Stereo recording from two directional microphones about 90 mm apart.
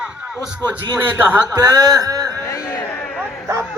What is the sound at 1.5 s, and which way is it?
Speech, 45° right (ahead or behind).